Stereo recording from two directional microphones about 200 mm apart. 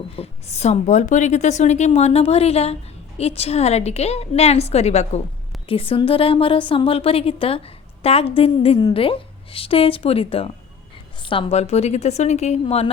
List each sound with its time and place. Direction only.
0.2 s a woman's voice: 35° left (ahead or behind)